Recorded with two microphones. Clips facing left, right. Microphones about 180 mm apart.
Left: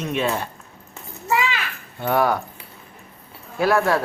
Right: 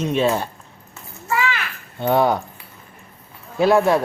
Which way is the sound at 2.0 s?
20° right (ahead or behind).